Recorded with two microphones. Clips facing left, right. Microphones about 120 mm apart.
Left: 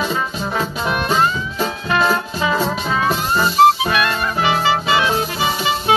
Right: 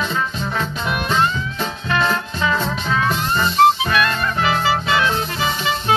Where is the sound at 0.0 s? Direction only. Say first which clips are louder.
Left 2 dB; 5° left (ahead or behind).